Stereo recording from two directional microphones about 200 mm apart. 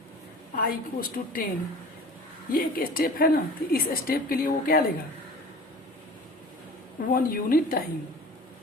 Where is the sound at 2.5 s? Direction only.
45° left (ahead or behind).